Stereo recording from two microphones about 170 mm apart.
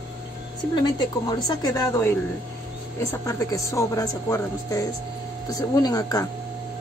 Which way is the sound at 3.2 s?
20° left (ahead or behind).